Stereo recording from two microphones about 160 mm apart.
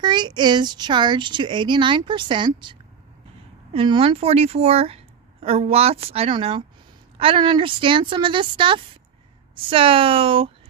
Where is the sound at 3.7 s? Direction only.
35° right (ahead or behind).